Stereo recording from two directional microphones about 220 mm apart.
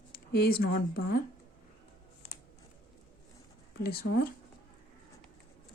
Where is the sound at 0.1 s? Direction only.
45° left (ahead or behind).